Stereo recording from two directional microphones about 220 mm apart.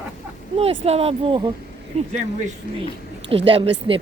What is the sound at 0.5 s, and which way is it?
A woman's voice, 25° right (ahead or behind).